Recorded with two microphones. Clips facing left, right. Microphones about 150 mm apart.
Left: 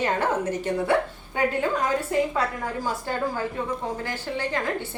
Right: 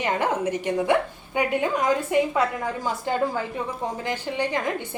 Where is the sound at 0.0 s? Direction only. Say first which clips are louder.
Even; 15° right (ahead or behind).